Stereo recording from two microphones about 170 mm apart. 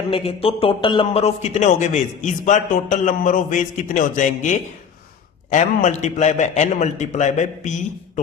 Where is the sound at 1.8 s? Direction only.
45° left (ahead or behind).